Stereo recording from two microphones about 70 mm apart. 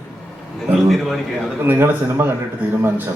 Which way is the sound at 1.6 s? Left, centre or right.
Right.